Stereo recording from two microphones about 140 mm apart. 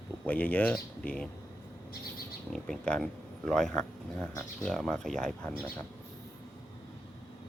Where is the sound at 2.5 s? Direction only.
5° left (ahead or behind).